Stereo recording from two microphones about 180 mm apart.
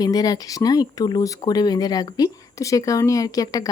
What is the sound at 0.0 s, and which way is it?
Speech, 20° left (ahead or behind).